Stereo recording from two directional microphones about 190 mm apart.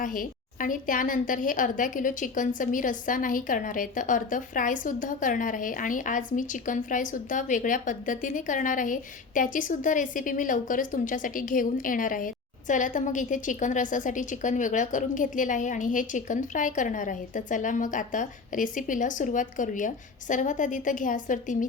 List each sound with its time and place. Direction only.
0.0 s a woman's voice: 45° left (ahead or behind)